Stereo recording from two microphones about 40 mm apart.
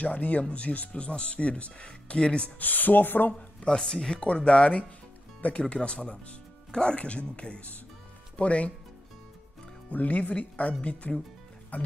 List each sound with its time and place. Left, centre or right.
0.0 s speech: left
2.6 s speech: left
3.3 s speech: centre
9.8 s speech: left